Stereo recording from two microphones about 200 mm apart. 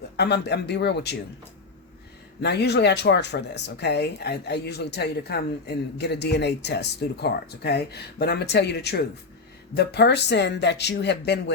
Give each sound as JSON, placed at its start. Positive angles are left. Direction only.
{"t": 0.2, "sound": "speech", "side_deg": 55}
{"t": 2.4, "sound": "speech", "side_deg": 55}